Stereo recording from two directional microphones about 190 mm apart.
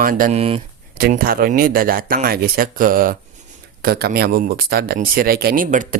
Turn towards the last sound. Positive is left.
turn(degrees=-45)  # may be behind; listen again after turning